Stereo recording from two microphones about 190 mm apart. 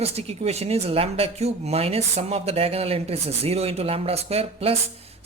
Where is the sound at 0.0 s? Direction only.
35° right (ahead or behind).